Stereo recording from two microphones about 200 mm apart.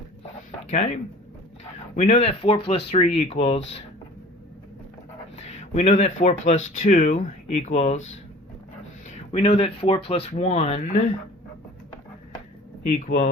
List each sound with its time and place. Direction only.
0.7 s speech: 35° left (ahead or behind)
2.0 s speech: 35° left (ahead or behind)
5.4 s speech: 35° left (ahead or behind)
9.1 s speech: 35° left (ahead or behind)
12.8 s speech: 35° left (ahead or behind)